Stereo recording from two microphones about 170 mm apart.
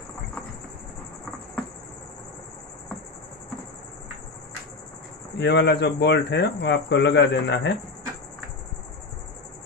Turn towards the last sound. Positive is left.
turn(degrees=90)